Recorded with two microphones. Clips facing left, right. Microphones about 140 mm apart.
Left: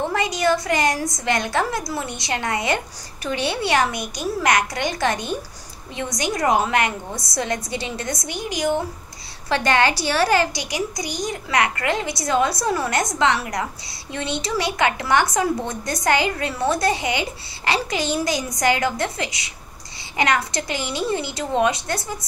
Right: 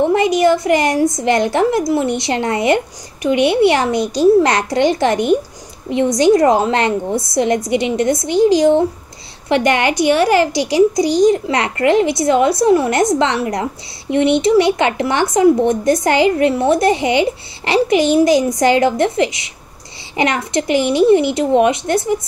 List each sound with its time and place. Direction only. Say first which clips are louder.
0.1 s speech: right 8 dB; 25° right (ahead or behind)